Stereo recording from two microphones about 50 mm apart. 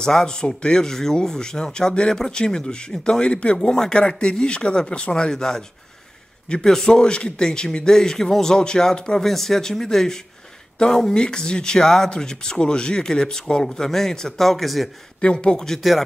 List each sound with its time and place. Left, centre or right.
0.0 s speech: centre
15.1 s speech: centre